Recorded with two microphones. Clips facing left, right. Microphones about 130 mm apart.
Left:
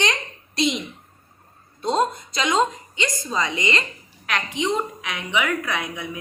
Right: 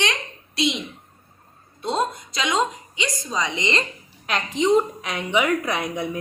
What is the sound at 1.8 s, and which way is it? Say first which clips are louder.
A woman's voice: left 2 dB; 5° right (ahead or behind).